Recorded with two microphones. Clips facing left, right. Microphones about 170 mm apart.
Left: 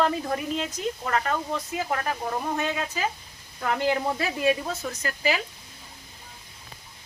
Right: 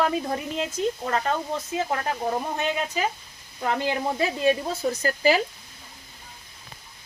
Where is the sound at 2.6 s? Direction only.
20° right (ahead or behind).